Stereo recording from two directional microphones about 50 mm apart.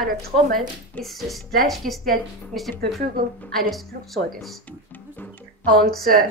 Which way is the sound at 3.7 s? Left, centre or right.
Centre.